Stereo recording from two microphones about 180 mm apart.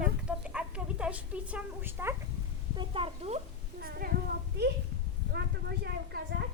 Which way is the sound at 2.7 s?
30° right (ahead or behind).